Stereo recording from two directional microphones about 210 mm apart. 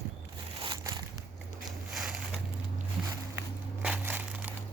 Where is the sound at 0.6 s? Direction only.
20° right (ahead or behind).